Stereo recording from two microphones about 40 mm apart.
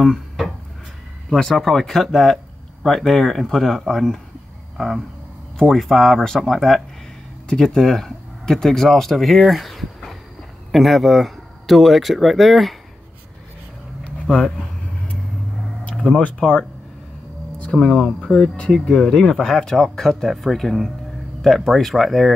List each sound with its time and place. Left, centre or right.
0.0 s speech: centre
6.2 s speech: centre
16.3 s speech: left
17.6 s speech: centre
19.2 s speech: centre